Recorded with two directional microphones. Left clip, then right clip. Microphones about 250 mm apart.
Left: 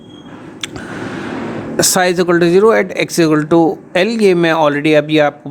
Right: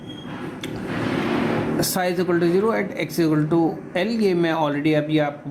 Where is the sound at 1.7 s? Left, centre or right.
Left.